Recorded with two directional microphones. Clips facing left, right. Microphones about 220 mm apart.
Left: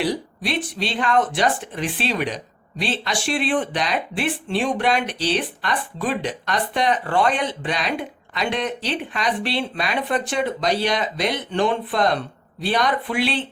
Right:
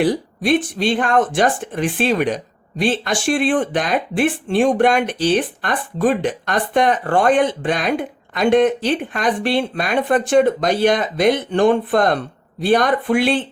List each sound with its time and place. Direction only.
0.0 s speech: 50° right (ahead or behind)